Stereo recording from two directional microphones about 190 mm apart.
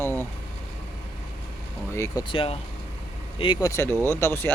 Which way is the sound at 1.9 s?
20° left (ahead or behind).